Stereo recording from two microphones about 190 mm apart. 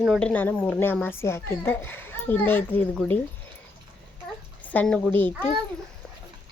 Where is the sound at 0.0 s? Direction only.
Centre (ahead or behind).